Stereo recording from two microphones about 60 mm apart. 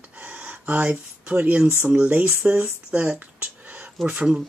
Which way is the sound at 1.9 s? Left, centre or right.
Centre.